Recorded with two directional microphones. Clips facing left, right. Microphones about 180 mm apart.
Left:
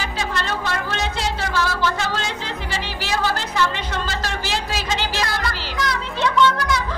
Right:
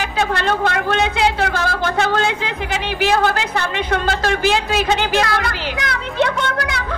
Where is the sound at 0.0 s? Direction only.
60° right (ahead or behind).